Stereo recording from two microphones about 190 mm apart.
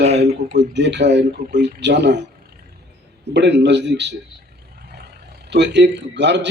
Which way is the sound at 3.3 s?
65° right (ahead or behind).